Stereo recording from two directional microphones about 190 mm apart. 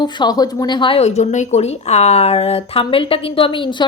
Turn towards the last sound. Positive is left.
turn(degrees=25)  # may be behind; listen again after turning